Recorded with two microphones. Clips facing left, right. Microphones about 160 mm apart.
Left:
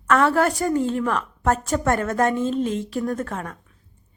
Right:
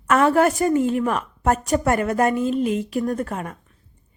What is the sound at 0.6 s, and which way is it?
A woman's voice, 15° right (ahead or behind).